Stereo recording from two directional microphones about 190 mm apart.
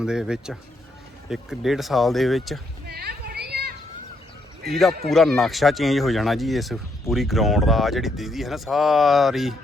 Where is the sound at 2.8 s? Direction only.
55° right (ahead or behind).